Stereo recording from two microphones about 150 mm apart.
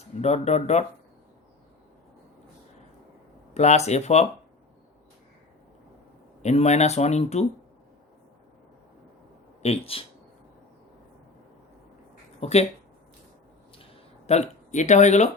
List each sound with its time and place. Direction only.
0.2 s speech: 45° left (ahead or behind)
3.5 s speech: 45° left (ahead or behind)
6.4 s speech: 50° left (ahead or behind)
9.6 s speech: 40° left (ahead or behind)
12.4 s speech: 45° left (ahead or behind)
14.3 s speech: 50° left (ahead or behind)